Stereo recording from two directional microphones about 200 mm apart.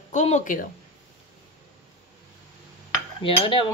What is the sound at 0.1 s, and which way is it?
Speech, 35° left (ahead or behind).